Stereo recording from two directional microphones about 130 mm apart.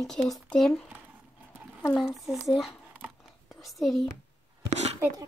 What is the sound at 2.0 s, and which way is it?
Speech, centre (ahead or behind).